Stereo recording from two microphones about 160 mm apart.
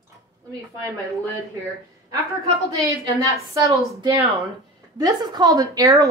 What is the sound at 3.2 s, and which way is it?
Speech, 20° right (ahead or behind).